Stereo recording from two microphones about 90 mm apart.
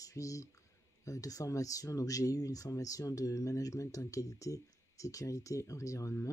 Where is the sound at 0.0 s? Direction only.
40° left (ahead or behind).